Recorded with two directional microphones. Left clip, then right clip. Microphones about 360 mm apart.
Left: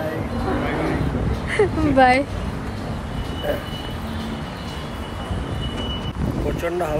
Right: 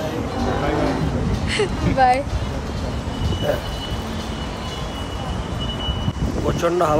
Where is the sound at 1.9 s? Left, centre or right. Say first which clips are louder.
Left 1 dB; centre.